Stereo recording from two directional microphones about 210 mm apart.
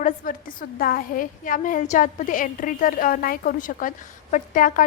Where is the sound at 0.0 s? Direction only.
40° left (ahead or behind).